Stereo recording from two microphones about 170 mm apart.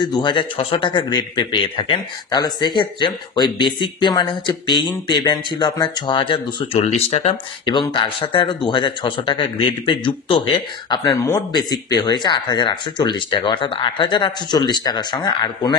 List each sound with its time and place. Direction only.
0.0 s speech: 25° left (ahead or behind)